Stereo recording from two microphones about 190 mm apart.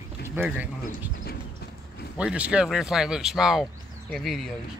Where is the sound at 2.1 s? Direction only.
5° right (ahead or behind).